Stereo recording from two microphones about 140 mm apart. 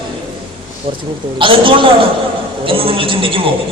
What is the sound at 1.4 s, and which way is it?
A man's voice, 35° right (ahead or behind).